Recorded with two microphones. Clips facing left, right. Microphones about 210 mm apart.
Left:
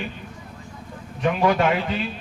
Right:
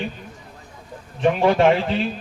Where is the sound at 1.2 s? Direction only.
30° right (ahead or behind).